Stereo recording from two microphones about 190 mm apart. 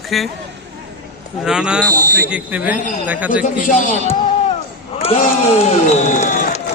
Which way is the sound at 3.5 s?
45° left (ahead or behind).